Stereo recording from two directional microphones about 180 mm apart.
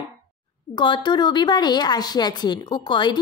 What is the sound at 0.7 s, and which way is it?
A woman's voice, 25° left (ahead or behind).